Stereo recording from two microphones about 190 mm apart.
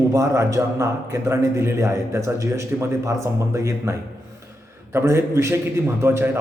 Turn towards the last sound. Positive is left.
turn(degrees=-15)  # may be behind; listen again after turning